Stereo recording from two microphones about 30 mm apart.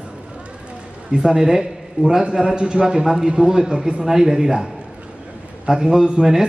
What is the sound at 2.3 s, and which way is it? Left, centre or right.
A man's voice, right.